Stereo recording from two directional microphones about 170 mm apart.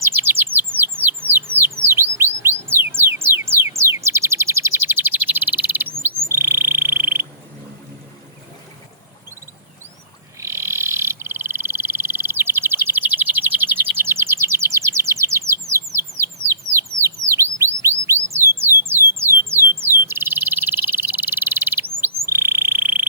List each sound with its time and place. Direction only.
0.0 s bird: 15° right (ahead or behind)
6.3 s frog: 15° right (ahead or behind)
10.4 s frog: 15° right (ahead or behind)
16.2 s bird: 15° right (ahead or behind)
18.8 s a sound: 15° right (ahead or behind)
19.8 s frog: 15° right (ahead or behind)